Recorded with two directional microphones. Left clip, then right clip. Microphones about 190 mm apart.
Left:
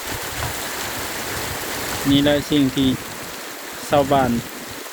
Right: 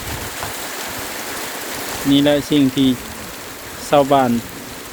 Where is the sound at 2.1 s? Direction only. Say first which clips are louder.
Right 3 dB; 10° right (ahead or behind).